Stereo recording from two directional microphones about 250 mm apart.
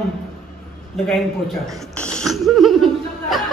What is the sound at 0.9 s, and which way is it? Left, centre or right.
Chuckle, centre.